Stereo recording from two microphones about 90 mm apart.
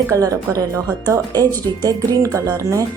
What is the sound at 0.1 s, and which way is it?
A woman's voice, 40° right (ahead or behind).